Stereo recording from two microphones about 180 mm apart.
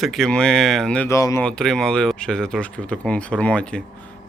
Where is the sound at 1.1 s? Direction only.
20° left (ahead or behind).